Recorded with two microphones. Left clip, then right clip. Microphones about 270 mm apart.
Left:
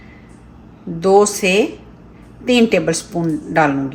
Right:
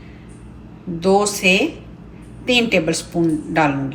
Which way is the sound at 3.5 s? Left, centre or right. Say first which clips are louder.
Left 5 dB; left.